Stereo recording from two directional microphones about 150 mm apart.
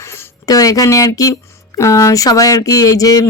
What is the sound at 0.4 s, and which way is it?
Speech, 25° left (ahead or behind).